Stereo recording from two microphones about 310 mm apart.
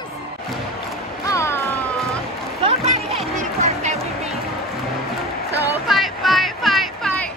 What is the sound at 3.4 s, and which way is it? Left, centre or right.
Music, right.